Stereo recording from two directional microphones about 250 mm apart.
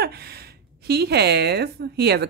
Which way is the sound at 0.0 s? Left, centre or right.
Right.